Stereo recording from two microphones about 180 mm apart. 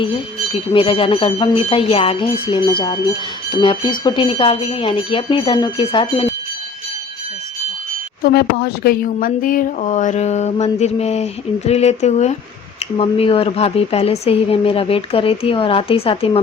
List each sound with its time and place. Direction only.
0.7 s speech: 30° left (ahead or behind)
8.2 s speech: 60° left (ahead or behind); by 16.4 s 30° left (ahead or behind)